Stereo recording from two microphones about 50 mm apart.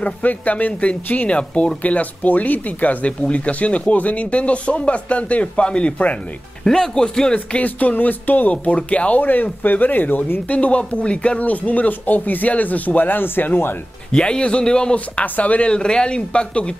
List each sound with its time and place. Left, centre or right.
0.0 s speech: left
6.6 s speech: centre
7.3 s speech: left
14.1 s speech: centre
15.2 s speech: left